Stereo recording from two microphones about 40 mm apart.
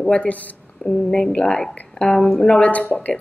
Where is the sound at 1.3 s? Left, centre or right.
Left.